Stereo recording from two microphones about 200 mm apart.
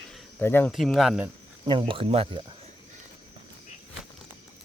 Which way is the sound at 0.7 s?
Centre (ahead or behind).